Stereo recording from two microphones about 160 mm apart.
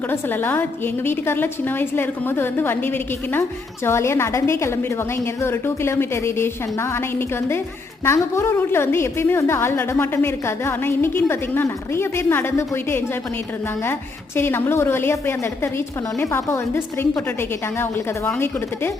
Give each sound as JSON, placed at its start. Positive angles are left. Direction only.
{"t": 0.1, "sound": "a woman's voice", "side_deg": 15}
{"t": 8.0, "sound": "a woman's voice", "side_deg": 15}
{"t": 14.3, "sound": "a woman's voice", "side_deg": 15}